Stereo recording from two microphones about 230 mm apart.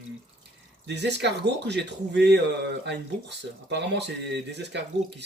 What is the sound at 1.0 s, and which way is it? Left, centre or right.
Speech, right.